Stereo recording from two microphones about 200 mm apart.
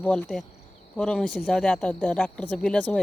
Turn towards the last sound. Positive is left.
turn(degrees=5)  # may be behind; listen again after turning